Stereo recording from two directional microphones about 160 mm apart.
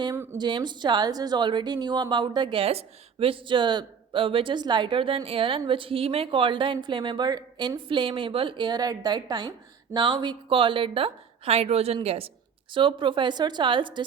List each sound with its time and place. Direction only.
0.0 s speech: 15° right (ahead or behind)
0.3 s a woman's voice: 30° right (ahead or behind)